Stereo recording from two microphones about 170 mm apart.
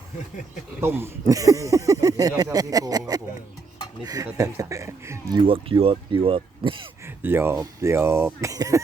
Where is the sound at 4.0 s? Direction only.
20° right (ahead or behind).